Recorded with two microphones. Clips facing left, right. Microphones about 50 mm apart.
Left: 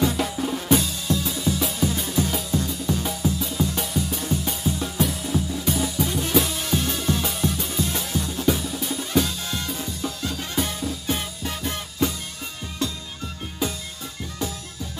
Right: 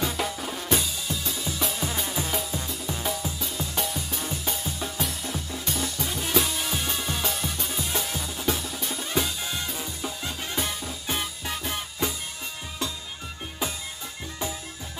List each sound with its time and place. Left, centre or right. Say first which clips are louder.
0.0 s drum: left 5 dB; centre
2.0 s music: left 4 dB; centre
13.6 s music: left 4 dB; centre
14.4 s music: left 2 dB; right